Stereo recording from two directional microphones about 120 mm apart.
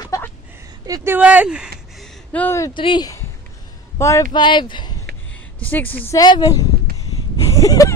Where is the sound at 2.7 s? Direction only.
40° left (ahead or behind).